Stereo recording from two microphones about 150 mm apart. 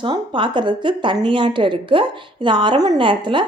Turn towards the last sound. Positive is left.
turn(degrees=-35)  # may be behind; listen again after turning